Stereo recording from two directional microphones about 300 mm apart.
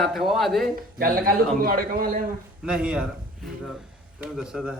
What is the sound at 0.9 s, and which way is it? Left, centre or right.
A man's voice, right.